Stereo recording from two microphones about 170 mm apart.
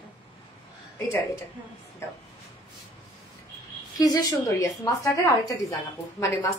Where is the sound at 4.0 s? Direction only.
20° left (ahead or behind).